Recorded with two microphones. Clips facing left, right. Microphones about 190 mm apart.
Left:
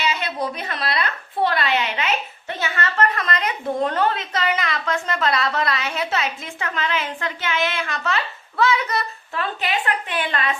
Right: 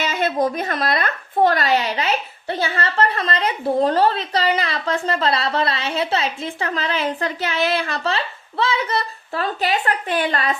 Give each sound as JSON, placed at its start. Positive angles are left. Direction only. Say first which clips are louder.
{"t": 0.0, "sound": "a woman's voice", "louder": "right 5 dB", "side_deg": -50}